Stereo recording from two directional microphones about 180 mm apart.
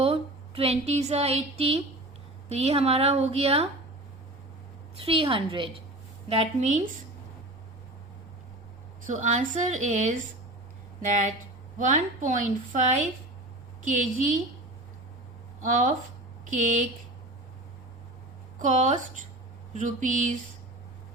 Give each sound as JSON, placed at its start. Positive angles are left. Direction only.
{"t": 0.0, "sound": "a woman's voice", "side_deg": -35}
{"t": 4.9, "sound": "a woman's voice", "side_deg": -30}
{"t": 9.0, "sound": "a woman's voice", "side_deg": -40}
{"t": 11.8, "sound": "a woman's voice", "side_deg": -45}
{"t": 15.6, "sound": "a woman's voice", "side_deg": -45}
{"t": 18.6, "sound": "a woman's voice", "side_deg": -45}